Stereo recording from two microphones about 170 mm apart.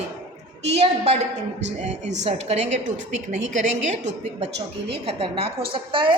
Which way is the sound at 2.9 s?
90° right.